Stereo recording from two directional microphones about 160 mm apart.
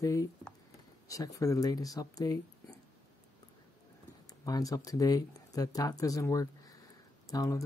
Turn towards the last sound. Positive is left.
turn(degrees=20)  # may be behind; listen again after turning